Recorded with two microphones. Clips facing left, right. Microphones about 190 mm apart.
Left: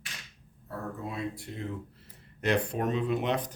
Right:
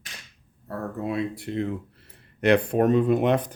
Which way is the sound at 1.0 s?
70° right (ahead or behind).